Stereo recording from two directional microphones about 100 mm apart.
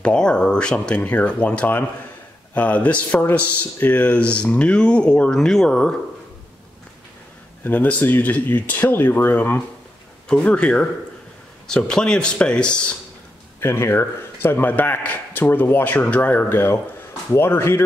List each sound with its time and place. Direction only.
0.0 s a man's voice: 10° left (ahead or behind)
7.6 s a man's voice: 15° left (ahead or behind)
10.2 s a man's voice: 5° left (ahead or behind)
13.6 s a man's voice: 25° left (ahead or behind)